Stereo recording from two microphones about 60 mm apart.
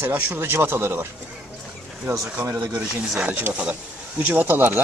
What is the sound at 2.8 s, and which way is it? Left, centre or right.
Speech, right.